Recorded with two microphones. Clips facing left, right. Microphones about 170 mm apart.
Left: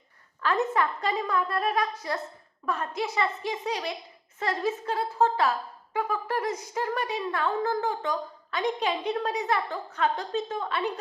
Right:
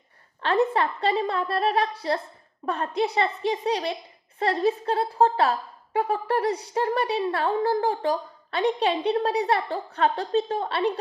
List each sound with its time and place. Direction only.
0.4 s a woman's voice: 30° right (ahead or behind)